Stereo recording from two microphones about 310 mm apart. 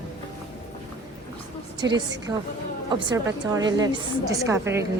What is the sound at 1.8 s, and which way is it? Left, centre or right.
A woman's voice, centre.